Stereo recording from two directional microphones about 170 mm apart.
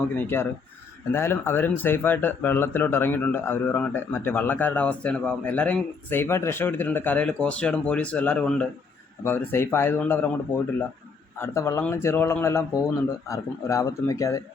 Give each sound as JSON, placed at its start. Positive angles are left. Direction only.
{"t": 0.2, "sound": "speech", "side_deg": 15}